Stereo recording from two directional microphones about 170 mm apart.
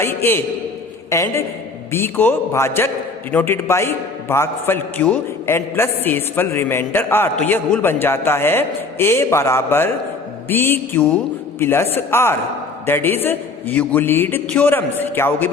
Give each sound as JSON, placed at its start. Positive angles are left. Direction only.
{"t": 0.0, "sound": "a man's voice", "side_deg": 15}